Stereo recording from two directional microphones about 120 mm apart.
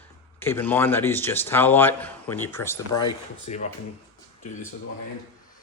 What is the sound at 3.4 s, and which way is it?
Speech, 80° left.